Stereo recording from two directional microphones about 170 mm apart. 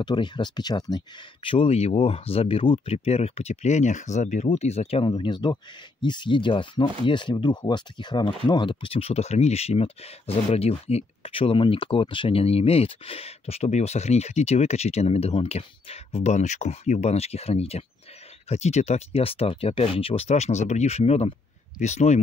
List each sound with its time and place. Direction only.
0.0 s speech: 25° left (ahead or behind)
5.1 s speech: 25° left (ahead or behind); by 22.2 s 40° left (ahead or behind)